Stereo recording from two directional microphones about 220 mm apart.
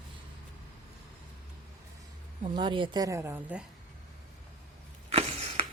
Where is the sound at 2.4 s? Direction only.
20° right (ahead or behind).